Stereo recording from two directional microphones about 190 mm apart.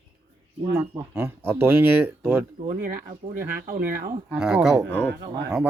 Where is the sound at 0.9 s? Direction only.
10° right (ahead or behind).